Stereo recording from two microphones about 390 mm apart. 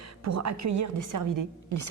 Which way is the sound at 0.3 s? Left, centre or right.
Right.